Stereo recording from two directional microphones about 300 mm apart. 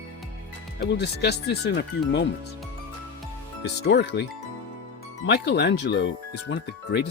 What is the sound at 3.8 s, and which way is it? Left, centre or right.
Speech, left.